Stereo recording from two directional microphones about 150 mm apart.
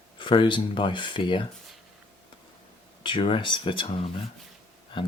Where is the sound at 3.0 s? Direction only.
35° left (ahead or behind).